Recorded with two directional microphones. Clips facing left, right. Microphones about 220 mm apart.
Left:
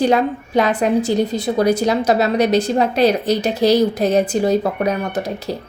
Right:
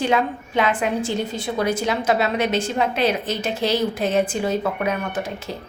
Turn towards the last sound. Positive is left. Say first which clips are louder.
# left 5 dB
turn(degrees=40)  # may be behind; listen again after turning